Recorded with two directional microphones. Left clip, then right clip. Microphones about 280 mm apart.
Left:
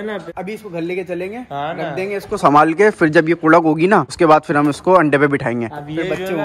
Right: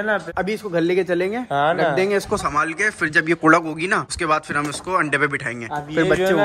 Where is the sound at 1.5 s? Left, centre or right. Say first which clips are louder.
Right 6 dB; right.